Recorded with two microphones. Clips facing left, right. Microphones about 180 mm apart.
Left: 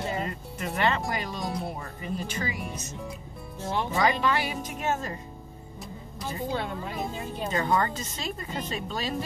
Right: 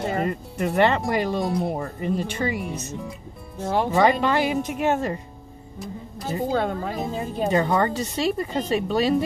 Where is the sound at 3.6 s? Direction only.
45° right (ahead or behind).